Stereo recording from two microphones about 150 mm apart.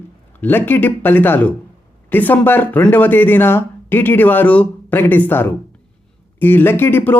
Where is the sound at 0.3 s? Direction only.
10° left (ahead or behind).